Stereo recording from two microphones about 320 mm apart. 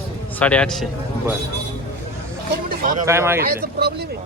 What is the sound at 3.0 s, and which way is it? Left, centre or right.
Speech, centre.